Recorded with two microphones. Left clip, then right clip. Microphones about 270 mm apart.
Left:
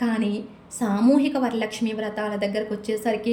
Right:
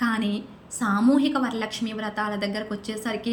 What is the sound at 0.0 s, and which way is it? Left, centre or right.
A woman's voice, centre.